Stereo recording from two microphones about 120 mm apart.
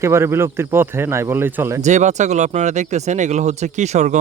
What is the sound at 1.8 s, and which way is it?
Speech, 75° right (ahead or behind).